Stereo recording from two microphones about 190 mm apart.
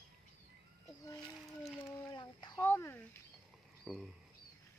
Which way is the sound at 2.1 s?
25° left (ahead or behind).